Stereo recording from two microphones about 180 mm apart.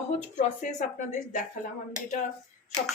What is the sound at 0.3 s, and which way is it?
Speech, 40° left (ahead or behind).